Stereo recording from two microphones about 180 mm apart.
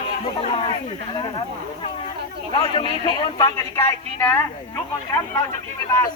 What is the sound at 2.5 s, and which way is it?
Speech, 25° left (ahead or behind).